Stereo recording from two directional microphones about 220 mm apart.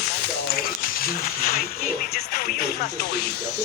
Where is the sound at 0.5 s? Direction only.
45° left (ahead or behind).